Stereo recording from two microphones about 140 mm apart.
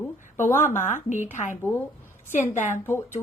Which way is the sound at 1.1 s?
65° left (ahead or behind).